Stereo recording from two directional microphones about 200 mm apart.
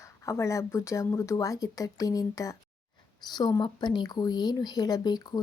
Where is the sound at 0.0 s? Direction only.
15° left (ahead or behind).